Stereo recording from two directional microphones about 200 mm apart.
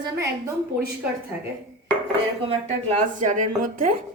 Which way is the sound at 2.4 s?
30° right (ahead or behind).